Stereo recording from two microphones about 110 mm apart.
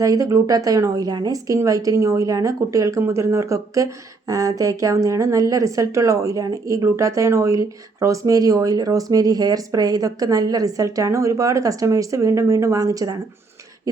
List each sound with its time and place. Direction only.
0.0 s a woman's voice: 30° right (ahead or behind)